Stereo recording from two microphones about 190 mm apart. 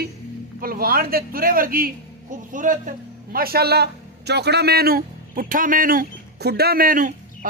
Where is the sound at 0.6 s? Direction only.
50° right (ahead or behind).